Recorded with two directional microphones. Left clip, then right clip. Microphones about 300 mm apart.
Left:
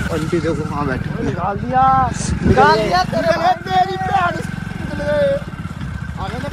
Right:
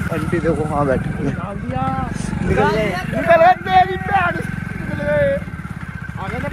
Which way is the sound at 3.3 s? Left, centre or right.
Centre.